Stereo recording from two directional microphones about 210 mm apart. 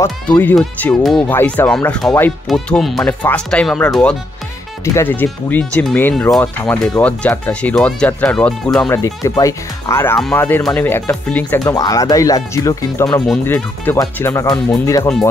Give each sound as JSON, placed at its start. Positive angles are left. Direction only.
{"t": 0.0, "sound": "speech", "side_deg": 10}